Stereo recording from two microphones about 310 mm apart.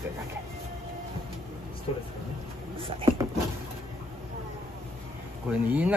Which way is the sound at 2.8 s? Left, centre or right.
Centre.